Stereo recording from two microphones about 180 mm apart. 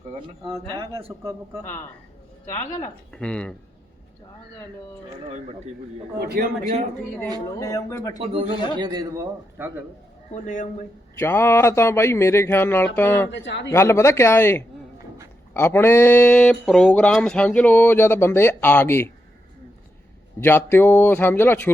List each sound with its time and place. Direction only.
0.8 s speech: 30° right (ahead or behind)
1.2 s a man's voice: 15° right (ahead or behind)
2.5 s speech: 15° left (ahead or behind)
3.1 s speech: 5° left (ahead or behind)
6.1 s a man's voice: 60° right (ahead or behind)
7.6 s speech: 20° left (ahead or behind)
8.2 s a man's voice: 30° right (ahead or behind)
10.4 s a man's voice: 45° left (ahead or behind)
11.2 s speech: 15° left (ahead or behind)
13.3 s speech: 75° left (ahead or behind)
13.7 s speech: 15° left (ahead or behind)
20.4 s speech: 10° left (ahead or behind)